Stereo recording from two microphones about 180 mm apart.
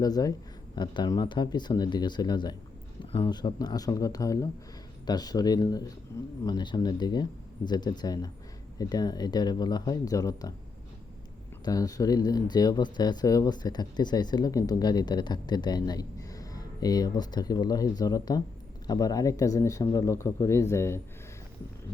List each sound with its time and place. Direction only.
0.0 s speech: 20° left (ahead or behind)
11.6 s speech: 20° left (ahead or behind)